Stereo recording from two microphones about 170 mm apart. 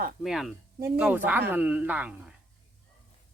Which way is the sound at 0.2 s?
Centre (ahead or behind).